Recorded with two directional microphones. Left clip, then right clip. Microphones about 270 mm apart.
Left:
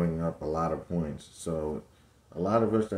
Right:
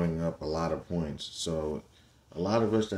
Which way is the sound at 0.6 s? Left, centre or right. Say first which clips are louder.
Left 1 dB; centre.